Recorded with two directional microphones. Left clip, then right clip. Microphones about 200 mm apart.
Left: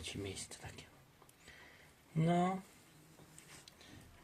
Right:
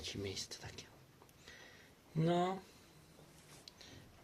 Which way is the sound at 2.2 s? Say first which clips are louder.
Even; 10° right (ahead or behind).